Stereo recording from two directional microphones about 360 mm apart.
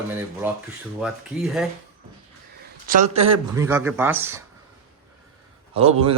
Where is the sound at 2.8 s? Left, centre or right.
Right.